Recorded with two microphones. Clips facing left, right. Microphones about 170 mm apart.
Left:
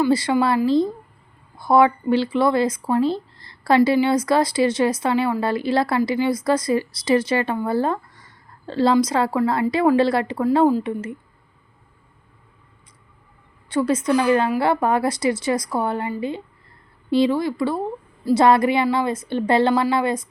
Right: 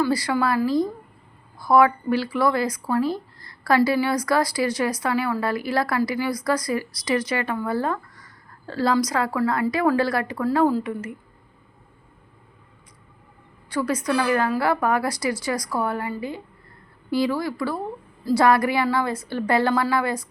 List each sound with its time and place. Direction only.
0.0 s speech: 25° left (ahead or behind)
13.7 s speech: 25° left (ahead or behind)